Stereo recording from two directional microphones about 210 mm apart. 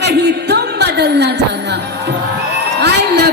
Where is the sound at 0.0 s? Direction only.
55° right (ahead or behind).